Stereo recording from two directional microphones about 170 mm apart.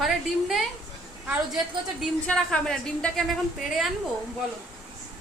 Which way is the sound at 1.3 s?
5° right (ahead or behind).